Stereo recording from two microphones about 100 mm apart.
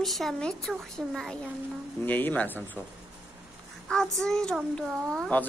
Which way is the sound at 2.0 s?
15° left (ahead or behind).